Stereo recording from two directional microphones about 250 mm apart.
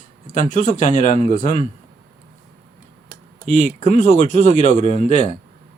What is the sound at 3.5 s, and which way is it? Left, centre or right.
Speech, left.